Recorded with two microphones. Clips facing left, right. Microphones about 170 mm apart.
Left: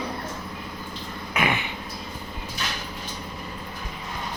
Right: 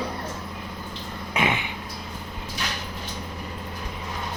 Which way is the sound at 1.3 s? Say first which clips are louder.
Even; 25° right (ahead or behind).